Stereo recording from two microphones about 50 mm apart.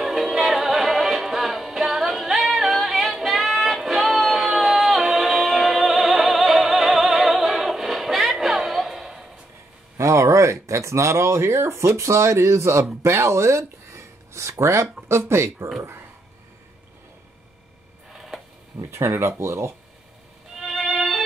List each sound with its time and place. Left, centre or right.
0.0 s music: centre
9.9 s speech: right
15.0 s speech: right
18.1 s a sound: centre
18.8 s speech: right
20.5 s music: centre